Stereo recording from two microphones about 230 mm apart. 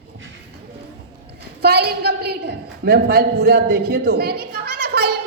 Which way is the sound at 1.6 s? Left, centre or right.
Right.